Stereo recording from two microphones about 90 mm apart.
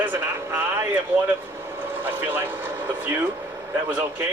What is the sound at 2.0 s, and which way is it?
Speech, 20° right (ahead or behind).